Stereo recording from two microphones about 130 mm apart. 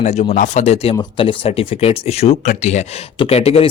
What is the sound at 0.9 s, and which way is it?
Speech, 40° left (ahead or behind).